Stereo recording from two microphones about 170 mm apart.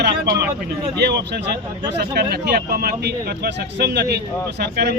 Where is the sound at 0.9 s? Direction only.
75° right (ahead or behind).